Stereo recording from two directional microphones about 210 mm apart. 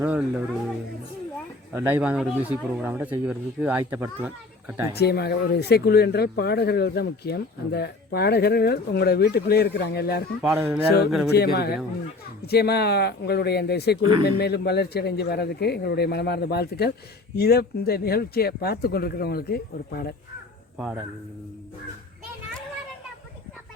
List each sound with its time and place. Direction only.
0.0 s speech: 5° right (ahead or behind)
1.7 s speech: 10° right (ahead or behind)
4.9 s speech: 50° left (ahead or behind)
10.4 s speech: 5° right (ahead or behind)
11.3 s speech: 50° left (ahead or behind)
20.7 s speech: 5° right (ahead or behind)